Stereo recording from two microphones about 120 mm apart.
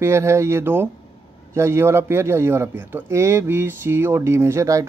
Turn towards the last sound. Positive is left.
turn(degrees=-25)  # may be behind; listen again after turning